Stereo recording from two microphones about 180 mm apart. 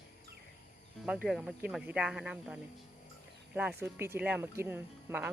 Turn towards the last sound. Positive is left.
turn(degrees=-10)  # may be behind; listen again after turning